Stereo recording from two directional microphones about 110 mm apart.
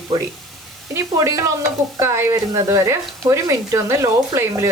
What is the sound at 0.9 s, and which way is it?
Speech, 25° right (ahead or behind).